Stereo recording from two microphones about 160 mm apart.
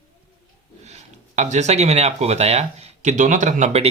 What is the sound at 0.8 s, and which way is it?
Speech, 45° right (ahead or behind).